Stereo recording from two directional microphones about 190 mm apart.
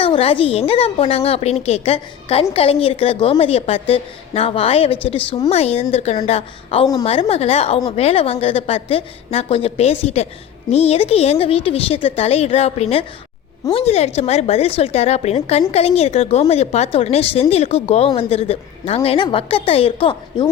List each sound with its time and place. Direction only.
0.0 s speech: 30° left (ahead or behind)